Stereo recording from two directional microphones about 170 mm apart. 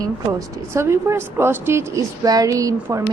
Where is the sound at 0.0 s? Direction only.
20° right (ahead or behind).